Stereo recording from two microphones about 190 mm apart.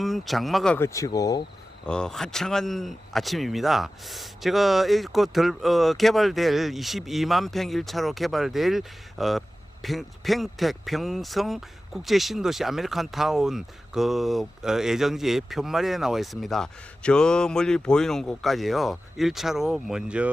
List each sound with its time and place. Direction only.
0.0 s speech: centre (ahead or behind)
0.9 s speech: 15° left (ahead or behind)
1.9 s speech: 5° left (ahead or behind)